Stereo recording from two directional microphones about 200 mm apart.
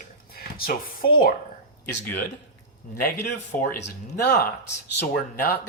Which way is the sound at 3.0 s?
45° left (ahead or behind).